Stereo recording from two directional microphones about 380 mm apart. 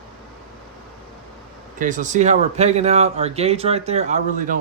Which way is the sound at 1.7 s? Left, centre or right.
Centre.